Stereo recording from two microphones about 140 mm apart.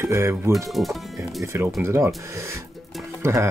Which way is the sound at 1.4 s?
20° right (ahead or behind).